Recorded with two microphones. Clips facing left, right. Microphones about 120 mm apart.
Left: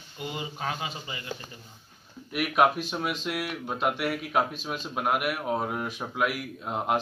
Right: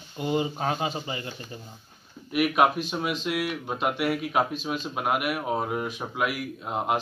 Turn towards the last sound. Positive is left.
turn(degrees=-5)  # may be behind; listen again after turning